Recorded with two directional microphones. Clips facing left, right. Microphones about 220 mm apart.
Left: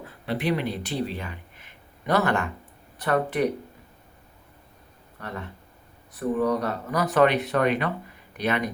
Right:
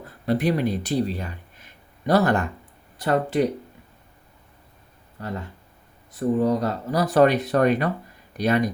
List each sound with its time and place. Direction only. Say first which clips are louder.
0.0 s speech: right 5 dB; 40° right (ahead or behind)
5.2 s speech: right 4 dB; 30° right (ahead or behind)